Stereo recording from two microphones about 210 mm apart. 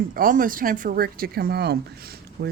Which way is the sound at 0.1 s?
40° right (ahead or behind).